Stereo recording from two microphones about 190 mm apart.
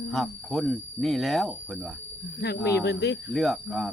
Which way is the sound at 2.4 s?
60° left (ahead or behind).